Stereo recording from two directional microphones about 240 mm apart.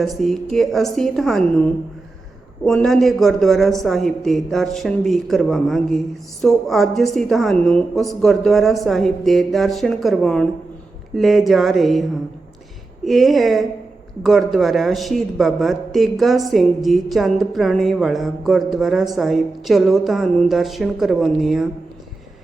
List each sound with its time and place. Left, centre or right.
0.0 s a man's voice: centre
13.1 s a man's voice: centre